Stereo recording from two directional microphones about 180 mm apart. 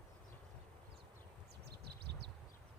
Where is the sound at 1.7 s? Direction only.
65° right (ahead or behind).